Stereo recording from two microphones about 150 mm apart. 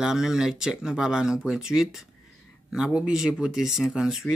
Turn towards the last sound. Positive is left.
turn(degrees=-5)  # may be behind; listen again after turning